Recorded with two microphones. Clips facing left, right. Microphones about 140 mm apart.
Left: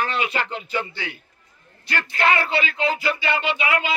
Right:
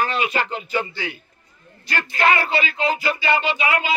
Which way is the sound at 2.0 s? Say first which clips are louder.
Right 2 dB; 15° right (ahead or behind).